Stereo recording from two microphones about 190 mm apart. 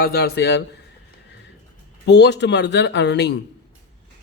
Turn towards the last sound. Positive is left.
turn(degrees=65)  # may be behind; listen again after turning